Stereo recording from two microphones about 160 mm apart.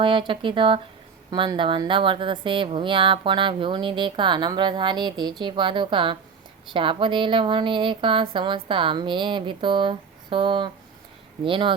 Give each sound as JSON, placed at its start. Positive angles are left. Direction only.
{"t": 0.0, "sound": "a woman's voice", "side_deg": -30}